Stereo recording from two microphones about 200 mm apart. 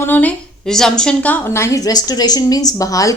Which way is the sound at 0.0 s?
10° left (ahead or behind).